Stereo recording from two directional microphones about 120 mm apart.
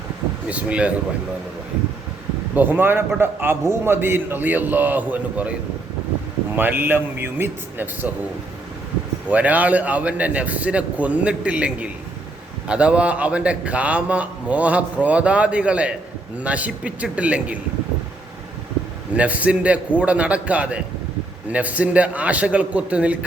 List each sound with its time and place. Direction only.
0.4 s a man's voice: 10° right (ahead or behind)
2.6 s a man's voice: 15° right (ahead or behind)
6.6 s a man's voice: 15° right (ahead or behind)
9.3 s a man's voice: 10° right (ahead or behind)
19.1 s a man's voice: 10° right (ahead or behind)